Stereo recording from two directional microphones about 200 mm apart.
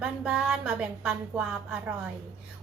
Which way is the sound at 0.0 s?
5° right (ahead or behind).